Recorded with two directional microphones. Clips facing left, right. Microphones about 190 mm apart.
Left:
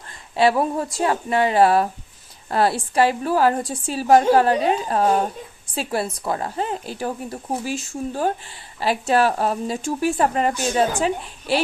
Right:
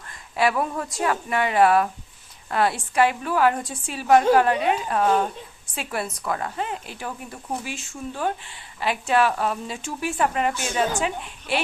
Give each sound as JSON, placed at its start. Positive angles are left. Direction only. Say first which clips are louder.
{"t": 0.3, "sound": "speech", "louder": "left 4 dB", "side_deg": 30}